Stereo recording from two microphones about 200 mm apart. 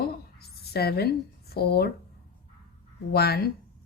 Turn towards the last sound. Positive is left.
turn(degrees=50)  # may be behind; listen again after turning